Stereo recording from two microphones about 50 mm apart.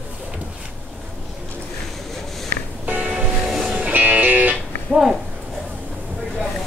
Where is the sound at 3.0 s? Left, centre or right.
Centre.